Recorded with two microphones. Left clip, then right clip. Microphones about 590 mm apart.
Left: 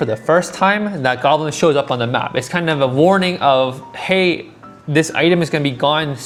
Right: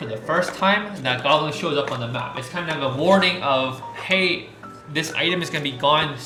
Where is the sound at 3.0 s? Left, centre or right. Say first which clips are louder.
Left 3 dB; left.